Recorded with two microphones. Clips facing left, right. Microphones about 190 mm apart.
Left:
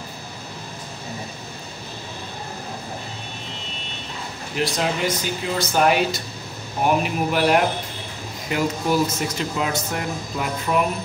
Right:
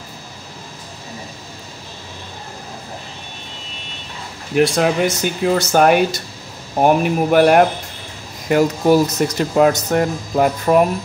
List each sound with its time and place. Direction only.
4.6 s speech: 60° right (ahead or behind)
5.8 s speech: 50° right (ahead or behind)